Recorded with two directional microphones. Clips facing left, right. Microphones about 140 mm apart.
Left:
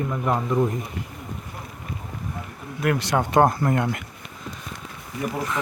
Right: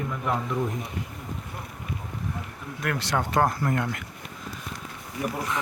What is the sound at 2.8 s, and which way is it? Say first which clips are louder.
Speech: left 5 dB; 15° left (ahead or behind).